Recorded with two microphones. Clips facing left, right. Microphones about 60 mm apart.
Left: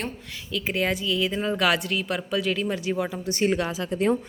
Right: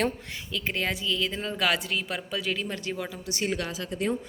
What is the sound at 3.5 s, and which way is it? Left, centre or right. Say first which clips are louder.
Speech: left 5 dB; left.